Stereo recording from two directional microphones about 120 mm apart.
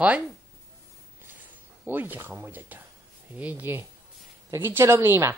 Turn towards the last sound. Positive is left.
turn(degrees=-20)  # may be behind; listen again after turning